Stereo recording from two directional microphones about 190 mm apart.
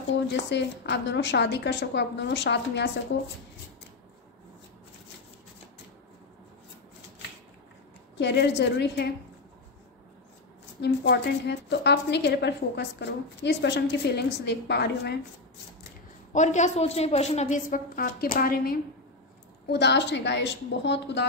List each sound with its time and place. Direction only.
0.3 s a woman's voice: 65° left (ahead or behind)
8.2 s a woman's voice: 65° left (ahead or behind)
10.8 s a woman's voice: 60° left (ahead or behind)
16.3 s a woman's voice: 40° left (ahead or behind)
19.7 s a woman's voice: 65° left (ahead or behind)